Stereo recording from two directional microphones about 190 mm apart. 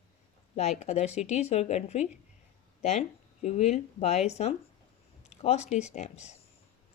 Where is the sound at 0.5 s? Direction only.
35° left (ahead or behind).